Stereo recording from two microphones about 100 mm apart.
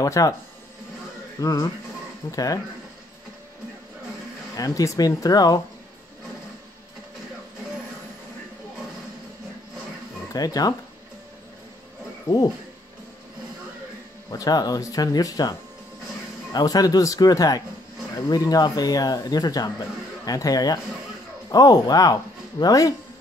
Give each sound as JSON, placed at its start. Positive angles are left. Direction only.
{"t": 0.0, "sound": "speech", "side_deg": 35}
{"t": 1.4, "sound": "speech", "side_deg": 35}
{"t": 4.6, "sound": "speech", "side_deg": 35}
{"t": 10.3, "sound": "speech", "side_deg": 40}
{"t": 12.3, "sound": "speech", "side_deg": 40}
{"t": 14.3, "sound": "speech", "side_deg": 40}
{"t": 16.5, "sound": "speech", "side_deg": 40}